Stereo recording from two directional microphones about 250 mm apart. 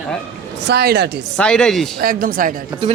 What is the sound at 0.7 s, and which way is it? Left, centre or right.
Speech, right.